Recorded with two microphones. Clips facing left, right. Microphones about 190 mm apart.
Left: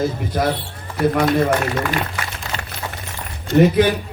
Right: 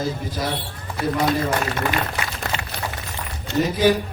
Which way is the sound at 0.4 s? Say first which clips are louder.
Left 9 dB; 60° left (ahead or behind).